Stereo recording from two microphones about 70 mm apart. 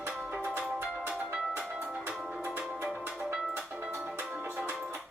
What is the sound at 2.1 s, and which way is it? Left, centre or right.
Music, centre.